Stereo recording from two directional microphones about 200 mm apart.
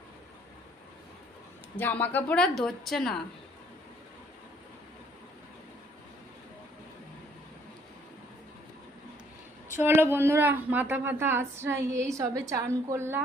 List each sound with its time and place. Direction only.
1.8 s a woman's voice: 10° left (ahead or behind)
9.8 s a woman's voice: 10° right (ahead or behind)